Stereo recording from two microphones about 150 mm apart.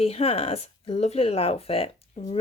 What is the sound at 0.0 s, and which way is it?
Speech, 40° left (ahead or behind).